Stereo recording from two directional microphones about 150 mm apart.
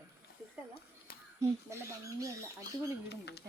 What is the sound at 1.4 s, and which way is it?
Speech, 20° right (ahead or behind).